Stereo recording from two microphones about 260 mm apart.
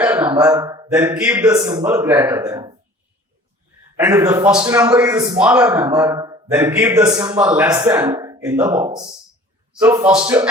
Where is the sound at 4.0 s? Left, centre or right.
Centre.